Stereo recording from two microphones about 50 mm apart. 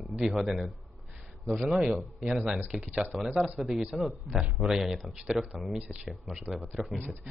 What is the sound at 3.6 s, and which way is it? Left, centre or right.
A man's voice, centre.